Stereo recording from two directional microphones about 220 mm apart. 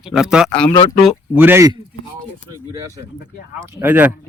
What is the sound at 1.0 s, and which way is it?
Speech, 5° right (ahead or behind).